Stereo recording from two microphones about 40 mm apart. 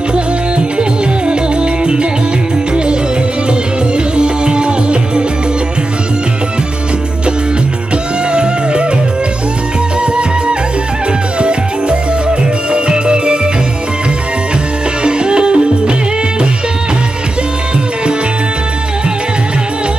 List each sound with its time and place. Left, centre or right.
0.7 s music: right
3.9 s music: right
8.3 s music: right
11.3 s music: right
15.0 s music: right